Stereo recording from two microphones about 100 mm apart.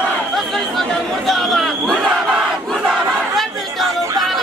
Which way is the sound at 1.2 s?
Centre (ahead or behind).